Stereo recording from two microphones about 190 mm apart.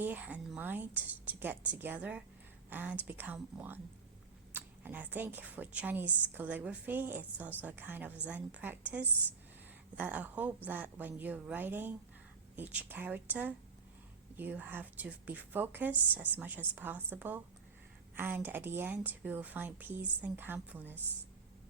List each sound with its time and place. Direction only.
0.0 s speech: 10° right (ahead or behind)